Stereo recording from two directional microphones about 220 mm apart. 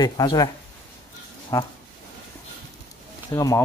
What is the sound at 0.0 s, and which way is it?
Speech, 20° left (ahead or behind).